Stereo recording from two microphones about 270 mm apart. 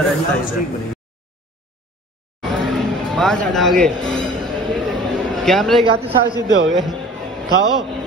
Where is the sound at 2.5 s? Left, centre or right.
Centre.